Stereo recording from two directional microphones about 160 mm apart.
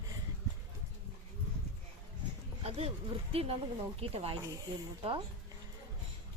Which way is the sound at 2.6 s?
40° right (ahead or behind).